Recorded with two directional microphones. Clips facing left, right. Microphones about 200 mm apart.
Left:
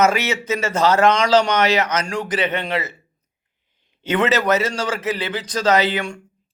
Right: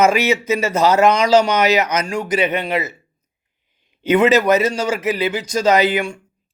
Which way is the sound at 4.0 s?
10° right (ahead or behind).